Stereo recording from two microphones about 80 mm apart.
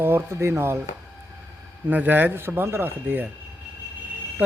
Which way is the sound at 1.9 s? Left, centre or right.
Right.